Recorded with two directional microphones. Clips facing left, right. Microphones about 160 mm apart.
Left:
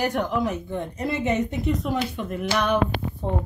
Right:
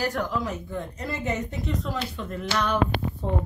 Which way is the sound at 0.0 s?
20° left (ahead or behind).